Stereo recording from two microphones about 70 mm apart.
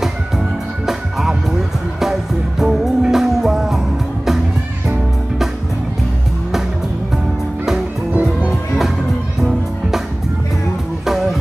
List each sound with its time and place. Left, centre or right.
2.6 s music: centre
8.1 s music: right
8.5 s music: centre